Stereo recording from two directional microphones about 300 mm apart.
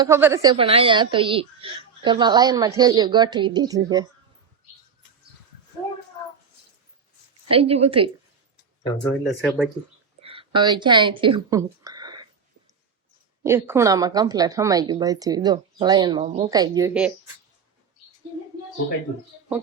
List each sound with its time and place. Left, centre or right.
0.0 s a woman's voice: centre
7.5 s a woman's voice: centre
9.4 s speech: centre
10.2 s speech: centre
13.4 s a woman's voice: centre